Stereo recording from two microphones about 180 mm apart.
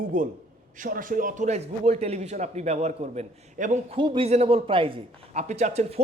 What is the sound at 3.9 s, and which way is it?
A man's voice, 25° right (ahead or behind).